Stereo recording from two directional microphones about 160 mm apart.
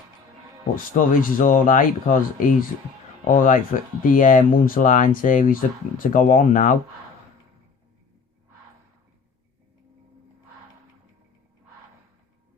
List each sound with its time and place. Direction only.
0.9 s speech: 60° left (ahead or behind)